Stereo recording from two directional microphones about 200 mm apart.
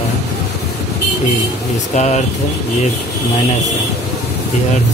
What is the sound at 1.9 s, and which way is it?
Speech, 35° left (ahead or behind).